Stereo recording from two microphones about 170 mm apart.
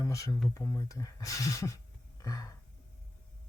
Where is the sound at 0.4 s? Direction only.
20° left (ahead or behind).